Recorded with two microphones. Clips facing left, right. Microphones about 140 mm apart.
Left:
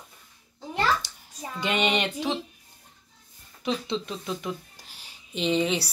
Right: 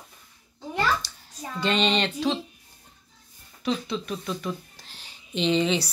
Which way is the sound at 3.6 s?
20° left (ahead or behind).